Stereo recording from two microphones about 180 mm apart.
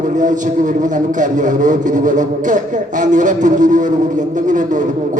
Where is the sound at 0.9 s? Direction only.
45° right (ahead or behind).